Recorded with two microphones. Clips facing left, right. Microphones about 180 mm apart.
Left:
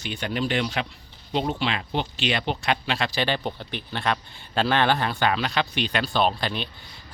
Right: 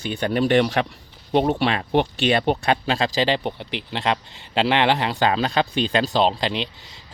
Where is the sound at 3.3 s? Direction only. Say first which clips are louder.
Right 4 dB; 20° right (ahead or behind).